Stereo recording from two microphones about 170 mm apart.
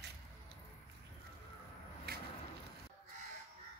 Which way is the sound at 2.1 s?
65° right (ahead or behind).